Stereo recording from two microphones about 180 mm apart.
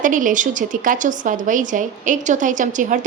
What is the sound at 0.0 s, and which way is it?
A woman's voice, 45° right (ahead or behind).